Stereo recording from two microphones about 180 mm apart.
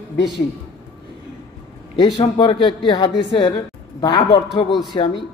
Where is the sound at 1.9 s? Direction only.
25° left (ahead or behind).